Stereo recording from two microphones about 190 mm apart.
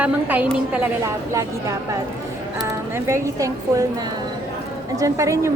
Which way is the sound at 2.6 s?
15° right (ahead or behind).